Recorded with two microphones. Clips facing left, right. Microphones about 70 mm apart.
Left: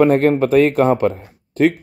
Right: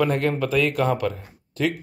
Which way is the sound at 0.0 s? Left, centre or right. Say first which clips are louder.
Left 9 dB; left.